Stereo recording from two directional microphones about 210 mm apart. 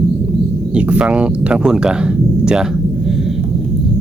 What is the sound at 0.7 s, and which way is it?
Speech, 5° right (ahead or behind).